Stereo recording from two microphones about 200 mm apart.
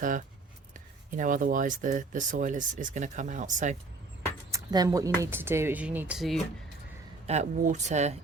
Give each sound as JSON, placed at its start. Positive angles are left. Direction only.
{"t": 1.1, "sound": "speech", "side_deg": -40}
{"t": 4.5, "sound": "speech", "side_deg": -20}
{"t": 7.3, "sound": "speech", "side_deg": -35}